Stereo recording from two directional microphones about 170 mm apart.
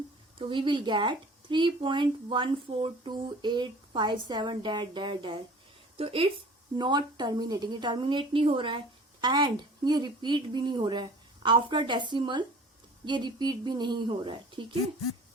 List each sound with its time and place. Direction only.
0.3 s speech: 30° right (ahead or behind)